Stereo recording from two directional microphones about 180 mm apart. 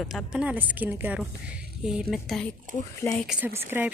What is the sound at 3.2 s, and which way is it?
Speech, 10° right (ahead or behind).